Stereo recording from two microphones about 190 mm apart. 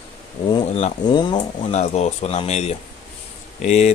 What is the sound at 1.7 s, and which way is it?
Speech, 35° left (ahead or behind).